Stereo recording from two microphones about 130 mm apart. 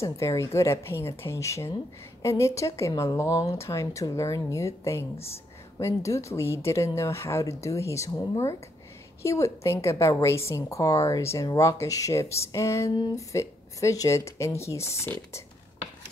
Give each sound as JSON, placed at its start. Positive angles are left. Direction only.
{"t": 0.0, "sound": "a woman's voice", "side_deg": 25}